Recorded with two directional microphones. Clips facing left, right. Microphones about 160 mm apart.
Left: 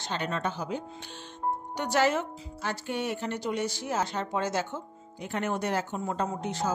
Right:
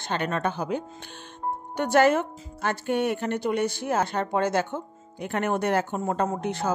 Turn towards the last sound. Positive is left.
turn(degrees=-60)  # may be behind; listen again after turning